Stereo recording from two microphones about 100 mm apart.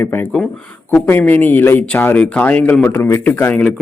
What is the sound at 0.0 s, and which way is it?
Speech, 20° left (ahead or behind).